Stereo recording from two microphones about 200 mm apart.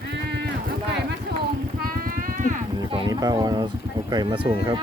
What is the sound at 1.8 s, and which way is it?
Clip-clop, 45° right (ahead or behind).